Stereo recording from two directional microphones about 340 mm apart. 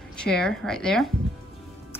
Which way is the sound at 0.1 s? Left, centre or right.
Centre.